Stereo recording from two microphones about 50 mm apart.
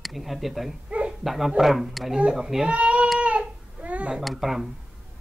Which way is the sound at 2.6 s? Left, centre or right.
Right.